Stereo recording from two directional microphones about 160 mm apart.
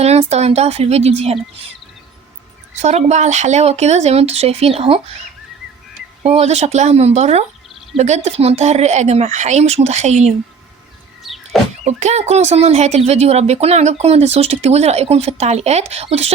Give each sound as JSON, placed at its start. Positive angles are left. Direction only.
{"t": 0.0, "sound": "speech", "side_deg": -40}
{"t": 2.8, "sound": "speech", "side_deg": -45}
{"t": 6.2, "sound": "speech", "side_deg": -40}
{"t": 11.2, "sound": "vehicle", "side_deg": 0}
{"t": 11.9, "sound": "speech", "side_deg": -45}